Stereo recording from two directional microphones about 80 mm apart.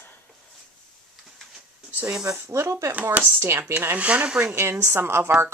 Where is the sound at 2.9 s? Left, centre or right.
Right.